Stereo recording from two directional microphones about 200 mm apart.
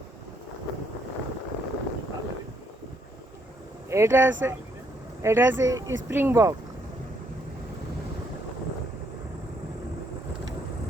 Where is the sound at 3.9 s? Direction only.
10° right (ahead or behind).